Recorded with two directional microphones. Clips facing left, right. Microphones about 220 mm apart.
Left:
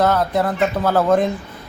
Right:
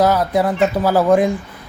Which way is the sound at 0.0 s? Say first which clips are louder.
Right 2 dB; 10° right (ahead or behind).